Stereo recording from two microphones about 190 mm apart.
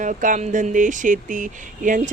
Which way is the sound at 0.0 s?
45° right (ahead or behind).